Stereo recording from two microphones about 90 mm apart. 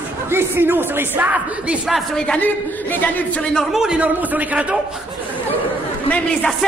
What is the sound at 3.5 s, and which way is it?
Speech, 5° right (ahead or behind).